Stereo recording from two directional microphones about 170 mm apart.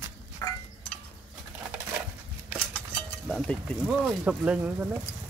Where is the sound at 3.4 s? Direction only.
5° left (ahead or behind).